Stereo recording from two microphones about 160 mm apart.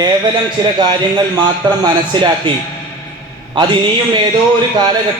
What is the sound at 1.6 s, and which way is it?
Speech, 25° right (ahead or behind).